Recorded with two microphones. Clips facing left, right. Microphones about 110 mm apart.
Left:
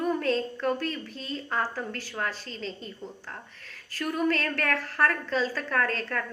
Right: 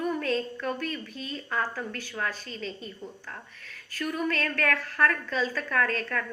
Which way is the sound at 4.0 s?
30° left (ahead or behind).